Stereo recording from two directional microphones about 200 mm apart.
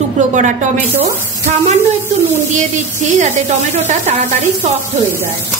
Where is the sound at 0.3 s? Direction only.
40° right (ahead or behind).